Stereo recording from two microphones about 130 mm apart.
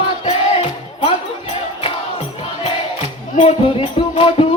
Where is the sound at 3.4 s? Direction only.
45° left (ahead or behind).